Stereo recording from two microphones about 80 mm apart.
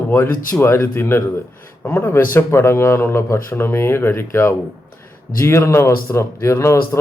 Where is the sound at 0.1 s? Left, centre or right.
Left.